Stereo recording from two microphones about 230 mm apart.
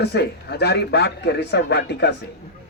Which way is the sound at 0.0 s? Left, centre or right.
Left.